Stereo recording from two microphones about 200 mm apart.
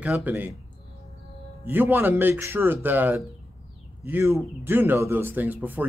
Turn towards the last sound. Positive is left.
turn(degrees=-10)  # may be behind; listen again after turning